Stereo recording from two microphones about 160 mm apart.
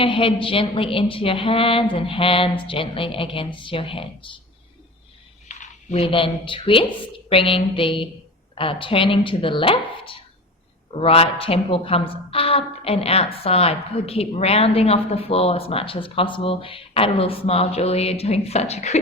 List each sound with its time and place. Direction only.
0.0 s a woman's voice: 35° left (ahead or behind)
5.5 s a woman's voice: 45° left (ahead or behind)